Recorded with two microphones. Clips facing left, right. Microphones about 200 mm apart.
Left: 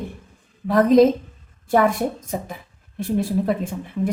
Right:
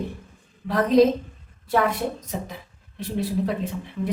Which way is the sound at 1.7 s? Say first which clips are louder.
Left 4 dB; 50° left (ahead or behind).